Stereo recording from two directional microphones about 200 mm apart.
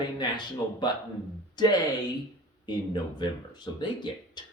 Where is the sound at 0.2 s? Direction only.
20° left (ahead or behind).